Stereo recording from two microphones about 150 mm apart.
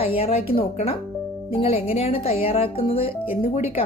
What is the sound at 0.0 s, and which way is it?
Speech, 40° left (ahead or behind).